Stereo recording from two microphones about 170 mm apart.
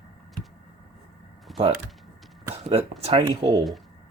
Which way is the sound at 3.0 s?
35° right (ahead or behind).